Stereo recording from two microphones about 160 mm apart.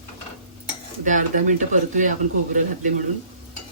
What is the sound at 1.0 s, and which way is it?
Speech, 50° right (ahead or behind).